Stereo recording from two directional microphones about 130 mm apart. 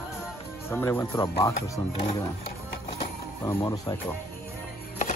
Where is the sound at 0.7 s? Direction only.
20° left (ahead or behind).